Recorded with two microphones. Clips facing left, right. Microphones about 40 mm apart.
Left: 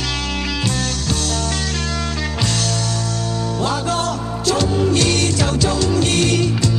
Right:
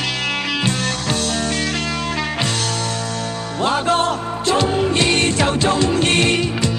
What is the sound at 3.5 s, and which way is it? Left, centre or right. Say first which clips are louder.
Music: right 5 dB; right.